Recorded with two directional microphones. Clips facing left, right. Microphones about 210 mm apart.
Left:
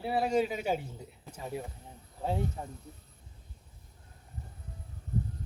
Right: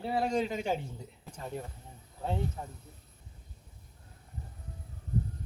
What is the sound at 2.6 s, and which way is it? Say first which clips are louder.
Speech: left 1 dB; 25° left (ahead or behind).